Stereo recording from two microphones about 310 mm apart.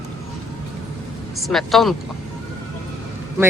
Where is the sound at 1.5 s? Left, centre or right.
Centre.